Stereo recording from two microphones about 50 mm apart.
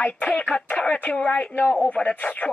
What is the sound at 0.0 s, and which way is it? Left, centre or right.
A woman's voice, left.